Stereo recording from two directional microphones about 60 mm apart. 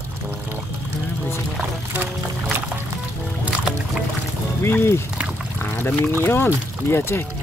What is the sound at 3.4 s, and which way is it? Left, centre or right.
Music, centre.